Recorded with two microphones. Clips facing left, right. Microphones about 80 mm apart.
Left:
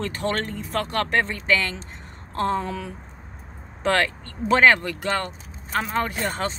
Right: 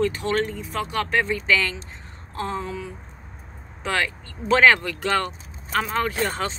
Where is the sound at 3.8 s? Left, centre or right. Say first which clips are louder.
Left 4 dB; left.